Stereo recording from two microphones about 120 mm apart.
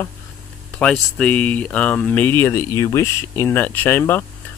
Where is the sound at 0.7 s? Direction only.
5° left (ahead or behind).